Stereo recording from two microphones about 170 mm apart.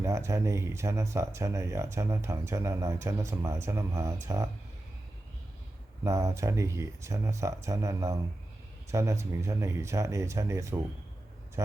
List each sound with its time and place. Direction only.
0.0 s speech: 15° right (ahead or behind)
6.1 s speech: 15° right (ahead or behind)